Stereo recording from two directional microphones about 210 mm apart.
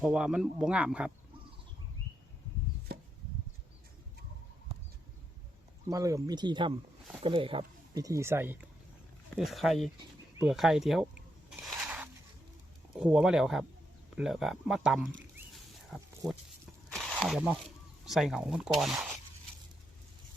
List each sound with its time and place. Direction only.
0.0 s speech: 5° right (ahead or behind)
5.9 s speech: 15° right (ahead or behind)
9.5 s speech: centre (ahead or behind)
11.5 s a sound: 5° right (ahead or behind)
13.0 s speech: 5° right (ahead or behind)
15.4 s a sound: centre (ahead or behind)
18.0 s speech: centre (ahead or behind)